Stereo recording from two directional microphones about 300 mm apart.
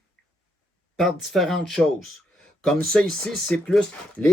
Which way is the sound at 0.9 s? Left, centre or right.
Centre.